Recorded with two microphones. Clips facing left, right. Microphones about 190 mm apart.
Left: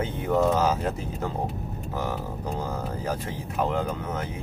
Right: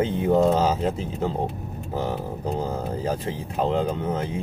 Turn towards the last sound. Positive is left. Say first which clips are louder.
# right 5 dB
turn(degrees=-30)  # may be behind; listen again after turning